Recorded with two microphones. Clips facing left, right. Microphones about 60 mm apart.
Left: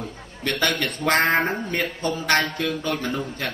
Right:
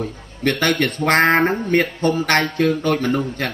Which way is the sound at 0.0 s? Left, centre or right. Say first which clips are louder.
Right 8 dB; right.